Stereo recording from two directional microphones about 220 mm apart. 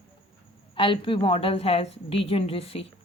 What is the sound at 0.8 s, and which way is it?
A woman's voice, 25° left (ahead or behind).